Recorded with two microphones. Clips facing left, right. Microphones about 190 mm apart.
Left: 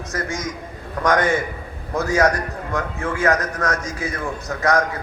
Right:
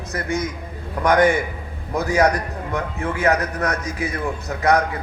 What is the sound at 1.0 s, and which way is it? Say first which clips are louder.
Speech: right 2 dB; 15° right (ahead or behind).